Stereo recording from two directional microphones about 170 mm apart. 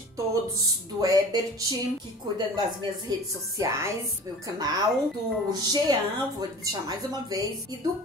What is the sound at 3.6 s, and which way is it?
A child's voice, 20° right (ahead or behind).